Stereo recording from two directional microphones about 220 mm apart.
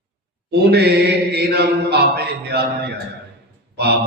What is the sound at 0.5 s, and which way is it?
Mantra, 45° right (ahead or behind).